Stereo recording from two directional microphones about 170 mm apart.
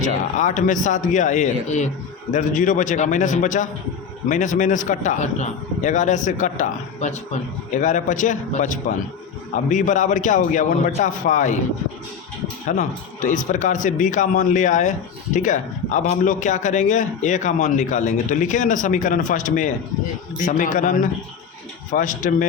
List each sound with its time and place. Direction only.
0.3 s a man's voice: 45° left (ahead or behind)
12.6 s a man's voice: 45° left (ahead or behind)